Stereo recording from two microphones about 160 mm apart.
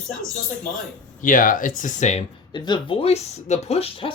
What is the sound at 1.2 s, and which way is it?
Speech, 55° left (ahead or behind).